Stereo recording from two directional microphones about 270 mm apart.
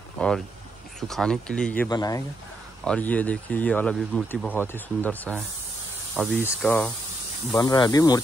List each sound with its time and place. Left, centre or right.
1.0 s speech: centre
7.5 s speech: centre